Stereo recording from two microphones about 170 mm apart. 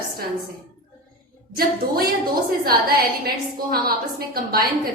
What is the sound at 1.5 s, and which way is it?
A woman's voice, 60° right (ahead or behind).